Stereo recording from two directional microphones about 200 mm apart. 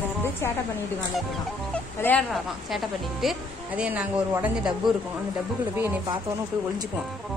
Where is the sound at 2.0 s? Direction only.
5° left (ahead or behind).